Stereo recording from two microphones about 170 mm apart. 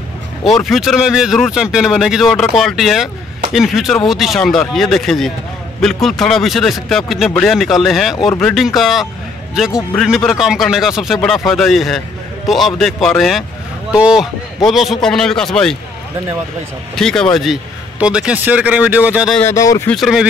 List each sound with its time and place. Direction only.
0.4 s speech: centre (ahead or behind)
16.9 s a man's voice: 5° left (ahead or behind)
19.3 s speech: 15° left (ahead or behind)
19.9 s speech: centre (ahead or behind)